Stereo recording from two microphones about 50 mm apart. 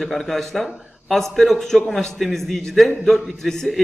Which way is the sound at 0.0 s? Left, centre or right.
Centre.